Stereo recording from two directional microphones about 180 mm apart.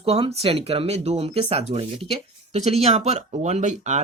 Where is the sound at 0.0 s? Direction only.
35° right (ahead or behind).